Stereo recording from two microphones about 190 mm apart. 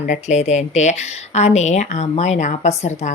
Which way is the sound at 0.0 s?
40° left (ahead or behind).